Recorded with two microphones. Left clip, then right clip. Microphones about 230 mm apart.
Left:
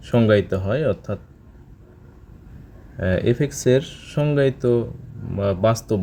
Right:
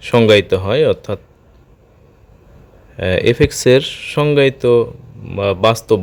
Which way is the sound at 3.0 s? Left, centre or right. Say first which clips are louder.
Right 8 dB; centre.